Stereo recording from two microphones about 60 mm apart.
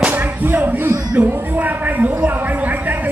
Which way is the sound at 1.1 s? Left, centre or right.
Right.